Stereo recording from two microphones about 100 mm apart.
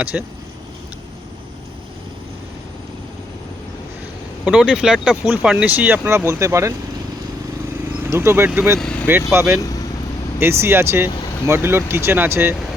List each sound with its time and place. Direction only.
0.0 s speech: 15° right (ahead or behind)
4.4 s speech: 10° right (ahead or behind); by 6.7 s 30° right (ahead or behind)
8.1 s speech: 25° right (ahead or behind)
8.8 s speech: 10° left (ahead or behind)
9.4 s speech: 25° right (ahead or behind)